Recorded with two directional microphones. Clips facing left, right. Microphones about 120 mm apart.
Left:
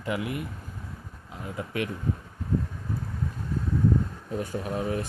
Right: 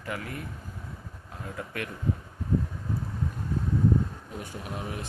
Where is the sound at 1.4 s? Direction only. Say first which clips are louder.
Left 5 dB; 15° left (ahead or behind).